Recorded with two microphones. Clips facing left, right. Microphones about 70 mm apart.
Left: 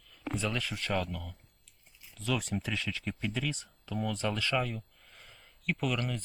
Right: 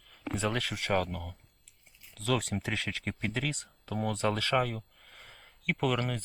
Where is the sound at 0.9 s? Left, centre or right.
Right.